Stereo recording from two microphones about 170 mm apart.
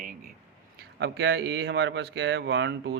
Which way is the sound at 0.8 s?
75° right (ahead or behind).